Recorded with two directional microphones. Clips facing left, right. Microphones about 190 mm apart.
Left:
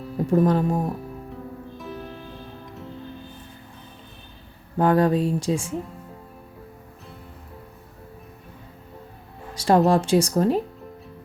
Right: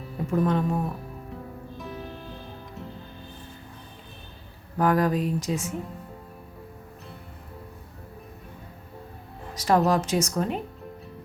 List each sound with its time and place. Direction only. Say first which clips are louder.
0.3 s speech: left 4 dB; 35° left (ahead or behind)
1.8 s music: left 1 dB; centre (ahead or behind)
4.8 s speech: left 4 dB; 30° left (ahead or behind)
9.6 s speech: left 4 dB; 30° left (ahead or behind)